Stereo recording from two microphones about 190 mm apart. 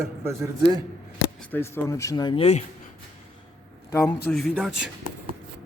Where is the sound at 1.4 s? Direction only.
10° left (ahead or behind); by 2.6 s 35° left (ahead or behind).